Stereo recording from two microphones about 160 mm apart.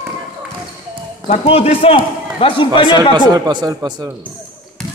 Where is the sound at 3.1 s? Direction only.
25° right (ahead or behind).